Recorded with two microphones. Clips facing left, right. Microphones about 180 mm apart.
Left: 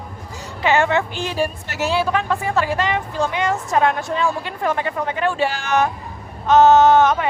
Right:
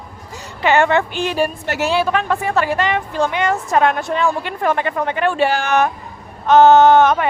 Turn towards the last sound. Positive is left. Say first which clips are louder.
# right 2 dB
turn(degrees=-60)  # may be behind; listen again after turning